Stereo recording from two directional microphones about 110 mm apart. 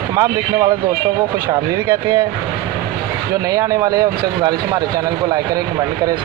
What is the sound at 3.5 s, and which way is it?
Speech, 35° right (ahead or behind).